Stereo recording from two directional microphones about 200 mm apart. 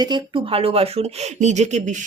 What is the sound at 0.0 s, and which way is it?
A woman's voice, 25° right (ahead or behind).